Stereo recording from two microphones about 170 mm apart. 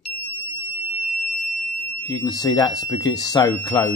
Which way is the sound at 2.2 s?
25° left (ahead or behind).